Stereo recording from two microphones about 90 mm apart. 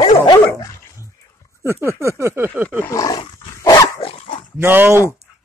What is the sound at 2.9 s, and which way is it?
Bow-wow, 40° left (ahead or behind).